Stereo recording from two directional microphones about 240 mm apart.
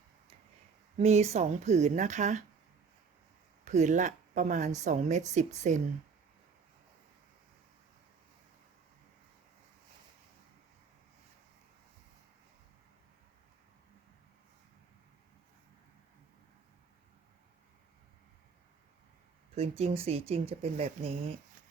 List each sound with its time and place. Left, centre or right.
0.9 s speech: right
3.6 s speech: right
19.5 s speech: right